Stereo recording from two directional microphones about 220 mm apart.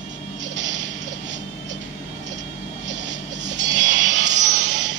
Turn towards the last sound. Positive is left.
turn(degrees=-50)  # may be behind; listen again after turning